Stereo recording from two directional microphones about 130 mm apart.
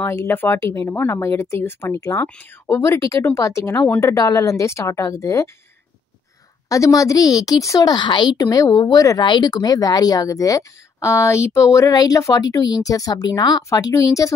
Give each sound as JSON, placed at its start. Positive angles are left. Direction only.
{"t": 0.0, "sound": "a woman's voice", "side_deg": 20}
{"t": 6.7, "sound": "a woman's voice", "side_deg": 25}